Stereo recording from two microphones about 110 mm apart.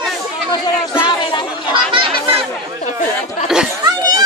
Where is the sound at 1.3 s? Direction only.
45° left (ahead or behind).